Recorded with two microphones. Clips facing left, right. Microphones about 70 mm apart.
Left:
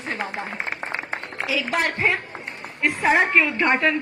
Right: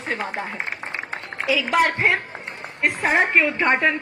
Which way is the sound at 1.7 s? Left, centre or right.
Right.